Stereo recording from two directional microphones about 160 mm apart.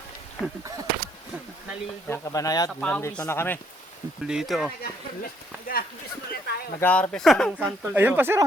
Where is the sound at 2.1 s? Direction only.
15° left (ahead or behind).